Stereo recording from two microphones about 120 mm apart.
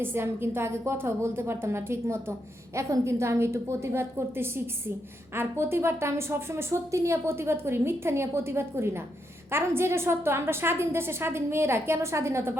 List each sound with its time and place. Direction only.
0.0 s a woman's voice: 20° right (ahead or behind)